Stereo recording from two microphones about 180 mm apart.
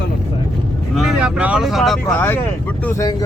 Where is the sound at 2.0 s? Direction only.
10° left (ahead or behind).